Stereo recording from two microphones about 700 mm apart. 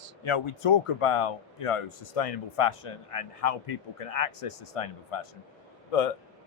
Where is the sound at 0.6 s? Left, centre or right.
Left.